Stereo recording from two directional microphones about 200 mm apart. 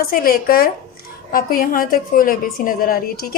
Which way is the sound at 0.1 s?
45° left (ahead or behind).